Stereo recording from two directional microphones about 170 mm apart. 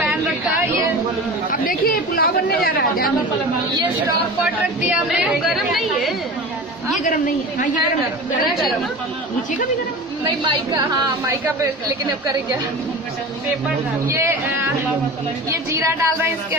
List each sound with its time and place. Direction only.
1.5 s chatter: 55° left (ahead or behind)
4.8 s a woman's voice: 5° right (ahead or behind)
7.0 s a woman's voice: 50° left (ahead or behind)
8.5 s a woman's voice: centre (ahead or behind)
10.2 s a woman's voice: 25° right (ahead or behind)
14.0 s a woman's voice: 15° right (ahead or behind)
15.7 s a woman's voice: 15° right (ahead or behind)